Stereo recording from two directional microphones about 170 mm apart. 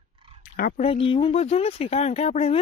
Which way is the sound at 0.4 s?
55° left (ahead or behind).